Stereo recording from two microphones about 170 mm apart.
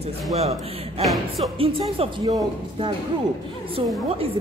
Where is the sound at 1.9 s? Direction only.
25° right (ahead or behind).